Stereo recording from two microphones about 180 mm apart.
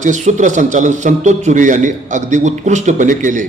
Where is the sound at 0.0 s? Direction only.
45° right (ahead or behind).